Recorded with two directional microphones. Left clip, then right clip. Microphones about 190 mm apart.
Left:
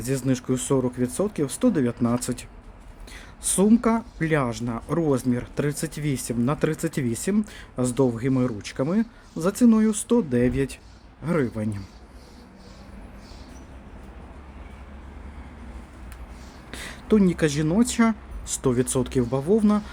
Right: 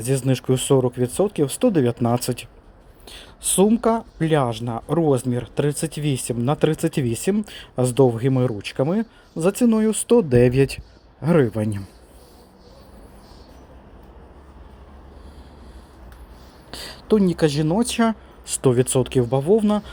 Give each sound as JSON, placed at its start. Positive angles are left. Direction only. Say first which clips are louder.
{"t": 0.0, "sound": "speech", "louder": "right 4 dB", "side_deg": -25}
{"t": 17.1, "sound": "speech", "louder": "right 3 dB", "side_deg": -15}